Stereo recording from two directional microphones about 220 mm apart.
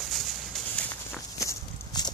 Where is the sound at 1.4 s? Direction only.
20° left (ahead or behind).